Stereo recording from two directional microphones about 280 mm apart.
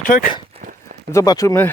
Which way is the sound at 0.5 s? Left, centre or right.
Right.